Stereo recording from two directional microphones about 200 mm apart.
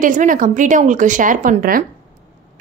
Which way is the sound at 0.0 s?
40° right (ahead or behind).